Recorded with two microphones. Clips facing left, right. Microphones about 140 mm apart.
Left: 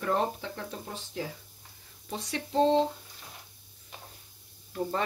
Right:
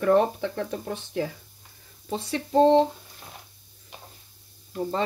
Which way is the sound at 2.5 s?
55° right (ahead or behind).